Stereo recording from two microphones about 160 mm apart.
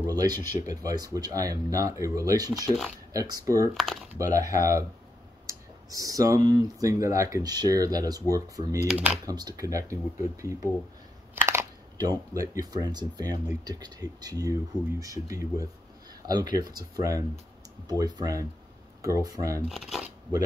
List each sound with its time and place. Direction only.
0.0 s speech: 25° right (ahead or behind)
3.7 s speech: 5° left (ahead or behind)
4.2 s speech: 20° right (ahead or behind)
8.8 s speech: 5° right (ahead or behind)
9.2 s speech: 25° right (ahead or behind)
19.7 s speech: centre (ahead or behind)